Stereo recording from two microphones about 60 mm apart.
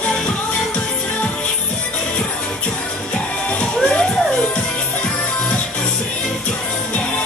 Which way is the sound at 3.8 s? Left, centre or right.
Centre.